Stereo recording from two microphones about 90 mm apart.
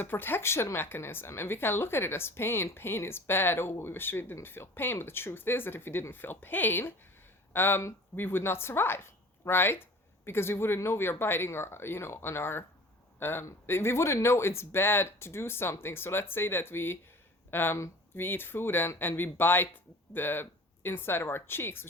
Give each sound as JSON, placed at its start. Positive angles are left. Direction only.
{"t": 0.0, "sound": "speech", "side_deg": 20}